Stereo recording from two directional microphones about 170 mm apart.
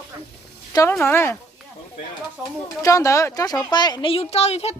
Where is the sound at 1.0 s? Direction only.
15° left (ahead or behind).